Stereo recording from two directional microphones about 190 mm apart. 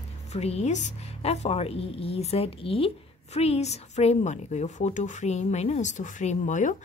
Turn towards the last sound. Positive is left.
turn(degrees=40)  # may be behind; listen again after turning